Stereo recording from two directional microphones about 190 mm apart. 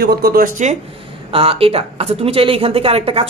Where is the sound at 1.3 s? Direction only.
30° right (ahead or behind).